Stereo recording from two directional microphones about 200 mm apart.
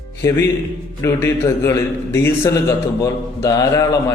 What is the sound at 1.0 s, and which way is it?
A man's voice, 15° left (ahead or behind).